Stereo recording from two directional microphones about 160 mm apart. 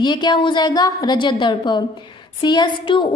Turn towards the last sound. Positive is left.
turn(degrees=30)  # may be behind; listen again after turning